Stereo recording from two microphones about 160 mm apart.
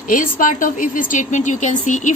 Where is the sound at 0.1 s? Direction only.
55° left (ahead or behind).